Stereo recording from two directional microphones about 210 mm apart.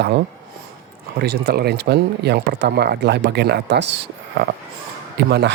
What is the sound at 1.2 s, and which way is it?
Speech, 50° right (ahead or behind).